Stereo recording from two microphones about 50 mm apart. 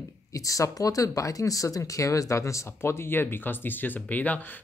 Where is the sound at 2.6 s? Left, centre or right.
Left.